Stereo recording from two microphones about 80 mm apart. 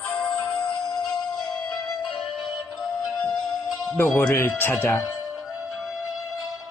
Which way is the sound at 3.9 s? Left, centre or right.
Left.